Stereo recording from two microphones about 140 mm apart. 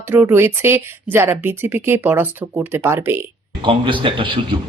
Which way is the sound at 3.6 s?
35° right (ahead or behind).